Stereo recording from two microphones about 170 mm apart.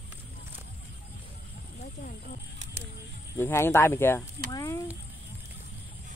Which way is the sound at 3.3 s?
15° left (ahead or behind).